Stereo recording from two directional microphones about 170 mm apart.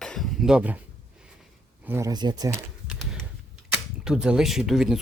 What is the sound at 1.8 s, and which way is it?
Speech, 15° right (ahead or behind).